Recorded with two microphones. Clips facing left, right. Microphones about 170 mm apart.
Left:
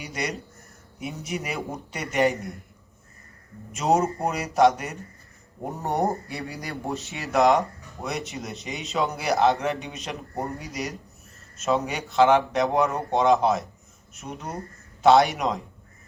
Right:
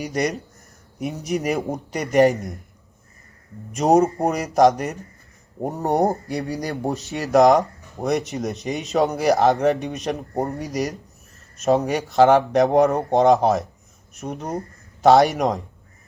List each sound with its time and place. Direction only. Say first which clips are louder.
0.0 s speech: right 8 dB; 40° right (ahead or behind)
2.3 s a man's voice: right 4 dB; centre (ahead or behind)
3.8 s a man's voice: right 6 dB; 40° right (ahead or behind)